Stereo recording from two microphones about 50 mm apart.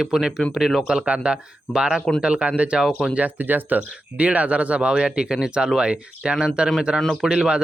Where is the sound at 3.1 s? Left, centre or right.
Right.